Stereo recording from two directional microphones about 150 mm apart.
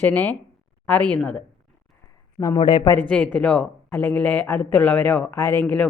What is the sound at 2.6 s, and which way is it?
Speech, 35° left (ahead or behind).